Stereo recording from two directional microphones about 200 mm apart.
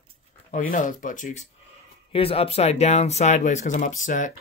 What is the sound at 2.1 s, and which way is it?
Speech, 30° left (ahead or behind).